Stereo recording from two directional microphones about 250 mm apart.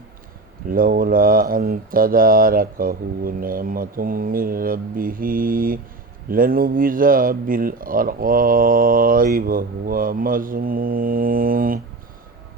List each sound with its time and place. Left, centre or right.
0.7 s speech: right